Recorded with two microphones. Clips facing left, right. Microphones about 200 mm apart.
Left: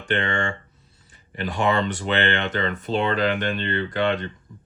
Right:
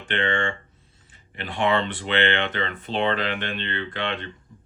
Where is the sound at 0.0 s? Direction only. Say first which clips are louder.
Left 1 dB; 40° left (ahead or behind).